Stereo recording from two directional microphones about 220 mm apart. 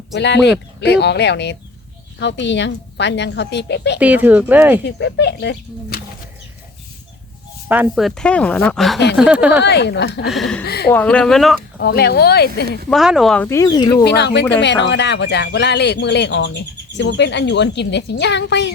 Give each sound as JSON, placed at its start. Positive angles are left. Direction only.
{"t": 0.1, "sound": "speech", "side_deg": 50}
{"t": 4.0, "sound": "speech", "side_deg": -5}
{"t": 4.9, "sound": "speech", "side_deg": 50}
{"t": 7.7, "sound": "speech", "side_deg": -5}
{"t": 9.6, "sound": "speech", "side_deg": 50}
{"t": 10.2, "sound": "speech", "side_deg": 0}
{"t": 10.6, "sound": "speech", "side_deg": 45}
{"t": 10.9, "sound": "speech", "side_deg": 5}
{"t": 11.8, "sound": "speech", "side_deg": 50}
{"t": 12.9, "sound": "speech", "side_deg": 0}
{"t": 14.0, "sound": "speech", "side_deg": 50}